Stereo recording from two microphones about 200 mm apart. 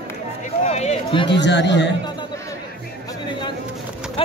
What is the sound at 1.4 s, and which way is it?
Speech, 65° left (ahead or behind).